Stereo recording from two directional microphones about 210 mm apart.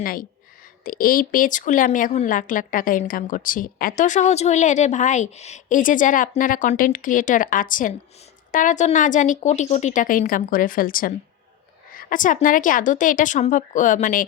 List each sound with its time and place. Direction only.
0.0 s speech: 40° left (ahead or behind)